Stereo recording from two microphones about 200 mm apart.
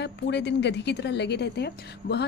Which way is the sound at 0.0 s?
60° left (ahead or behind).